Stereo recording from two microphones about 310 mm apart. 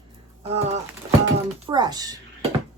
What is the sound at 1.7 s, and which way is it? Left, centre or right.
Speech, centre.